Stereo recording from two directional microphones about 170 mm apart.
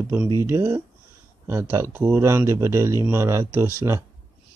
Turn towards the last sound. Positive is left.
turn(degrees=-15)  # may be behind; listen again after turning